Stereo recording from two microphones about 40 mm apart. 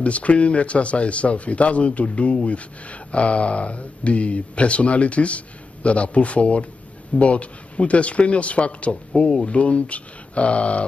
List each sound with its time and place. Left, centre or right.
0.0 s speech: left